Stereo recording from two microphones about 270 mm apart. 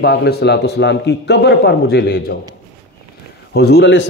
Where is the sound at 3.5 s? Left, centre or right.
Left.